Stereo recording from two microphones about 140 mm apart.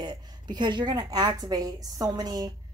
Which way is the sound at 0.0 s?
30° right (ahead or behind).